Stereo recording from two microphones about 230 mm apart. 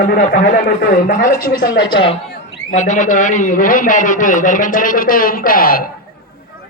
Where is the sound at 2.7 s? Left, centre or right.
Left.